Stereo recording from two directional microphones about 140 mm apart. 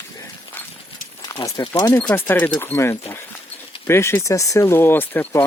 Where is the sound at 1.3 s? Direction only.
25° left (ahead or behind).